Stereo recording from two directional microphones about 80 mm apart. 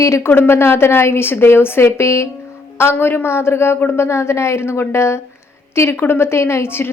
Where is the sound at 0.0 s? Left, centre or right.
Left.